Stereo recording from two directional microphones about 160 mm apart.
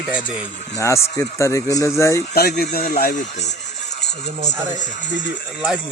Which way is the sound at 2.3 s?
70° left (ahead or behind).